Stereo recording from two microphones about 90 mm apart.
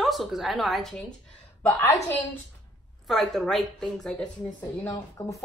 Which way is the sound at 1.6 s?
25° left (ahead or behind).